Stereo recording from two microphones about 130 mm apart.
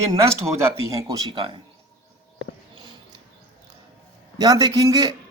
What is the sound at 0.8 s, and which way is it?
Speech, 25° right (ahead or behind).